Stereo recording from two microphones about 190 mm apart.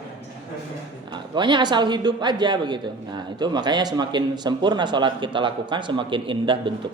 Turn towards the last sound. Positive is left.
turn(degrees=-25)  # may be behind; listen again after turning